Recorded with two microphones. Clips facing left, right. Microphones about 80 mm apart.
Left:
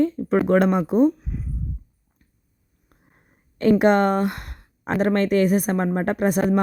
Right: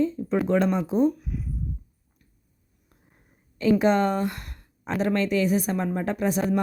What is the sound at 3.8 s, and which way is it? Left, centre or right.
Speech, left.